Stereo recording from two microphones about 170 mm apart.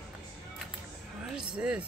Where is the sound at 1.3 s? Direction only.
5° right (ahead or behind).